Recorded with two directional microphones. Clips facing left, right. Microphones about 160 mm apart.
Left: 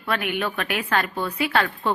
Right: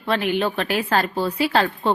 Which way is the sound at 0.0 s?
30° right (ahead or behind).